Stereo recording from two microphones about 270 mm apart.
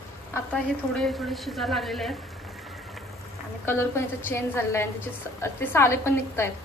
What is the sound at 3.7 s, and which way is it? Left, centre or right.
A woman's voice, centre.